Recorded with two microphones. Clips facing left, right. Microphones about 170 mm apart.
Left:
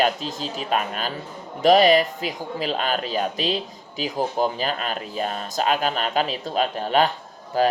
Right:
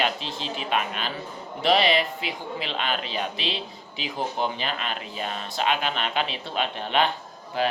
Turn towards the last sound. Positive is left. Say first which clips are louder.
# left 5 dB
turn(degrees=40)  # may be behind; listen again after turning